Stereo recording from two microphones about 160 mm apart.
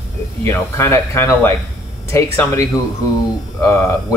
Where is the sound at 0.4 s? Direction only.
15° left (ahead or behind).